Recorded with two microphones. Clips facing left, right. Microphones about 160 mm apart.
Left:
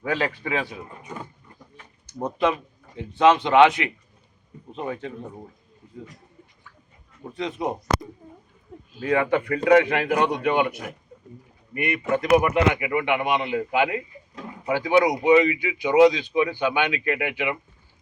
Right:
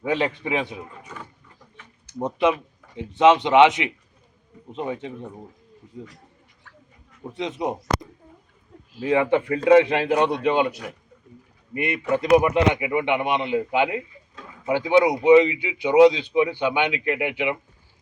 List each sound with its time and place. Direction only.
0.0 s speech: 20° right (ahead or behind)
1.0 s roaring cats: 25° left (ahead or behind)
2.2 s speech: 20° right (ahead or behind)
7.3 s speech: 20° right (ahead or behind)
9.0 s speech: 25° right (ahead or behind)